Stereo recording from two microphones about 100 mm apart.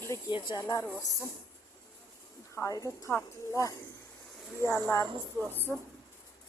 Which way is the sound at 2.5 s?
35° left (ahead or behind).